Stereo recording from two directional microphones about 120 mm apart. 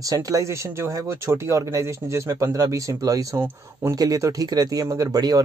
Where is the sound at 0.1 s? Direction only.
25° right (ahead or behind).